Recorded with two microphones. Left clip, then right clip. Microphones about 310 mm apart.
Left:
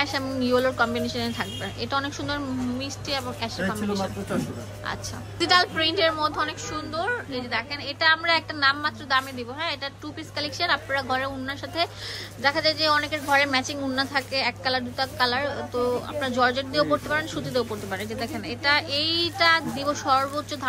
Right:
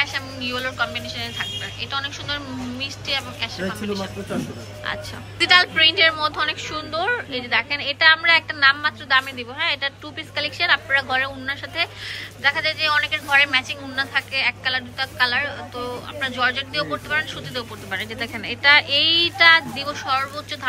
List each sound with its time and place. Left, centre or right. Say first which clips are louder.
0.0 s a woman's voice: right 2 dB; centre
5.4 s a woman's voice: right 6 dB; centre